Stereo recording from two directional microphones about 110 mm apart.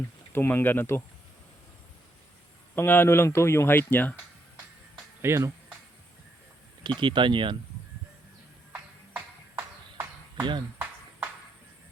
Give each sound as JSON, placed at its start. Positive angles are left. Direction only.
{"t": 0.3, "sound": "speech", "side_deg": 20}
{"t": 2.7, "sound": "speech", "side_deg": 20}
{"t": 5.2, "sound": "speech", "side_deg": -25}
{"t": 6.8, "sound": "speech", "side_deg": -45}
{"t": 8.7, "sound": "music", "side_deg": -20}